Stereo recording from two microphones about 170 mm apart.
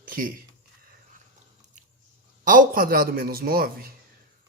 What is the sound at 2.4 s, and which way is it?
A man's voice, 55° right (ahead or behind).